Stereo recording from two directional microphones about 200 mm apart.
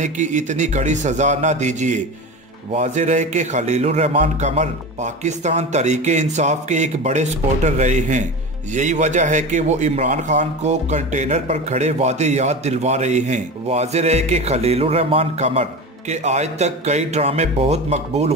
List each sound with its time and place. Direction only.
0.0 s a man's voice: 35° right (ahead or behind)